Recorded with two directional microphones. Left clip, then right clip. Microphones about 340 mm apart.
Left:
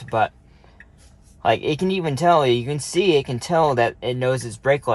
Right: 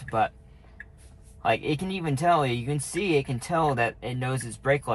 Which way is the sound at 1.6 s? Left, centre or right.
Left.